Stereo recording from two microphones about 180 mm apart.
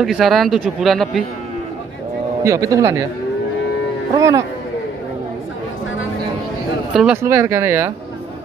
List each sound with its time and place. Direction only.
0.0 s speech: centre (ahead or behind)
2.4 s speech: 15° right (ahead or behind)
4.1 s speech: 20° right (ahead or behind)
6.9 s speech: centre (ahead or behind)
7.2 s speech: 15° right (ahead or behind)